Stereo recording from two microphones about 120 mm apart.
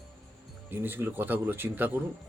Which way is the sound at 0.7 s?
15° right (ahead or behind).